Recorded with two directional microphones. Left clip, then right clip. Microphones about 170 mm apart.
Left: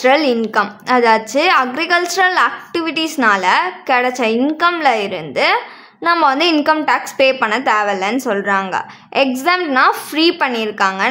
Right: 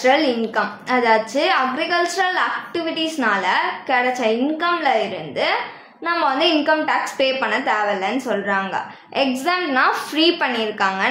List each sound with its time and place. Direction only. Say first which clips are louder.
0.0 s a woman's voice: left 4 dB; 35° left (ahead or behind)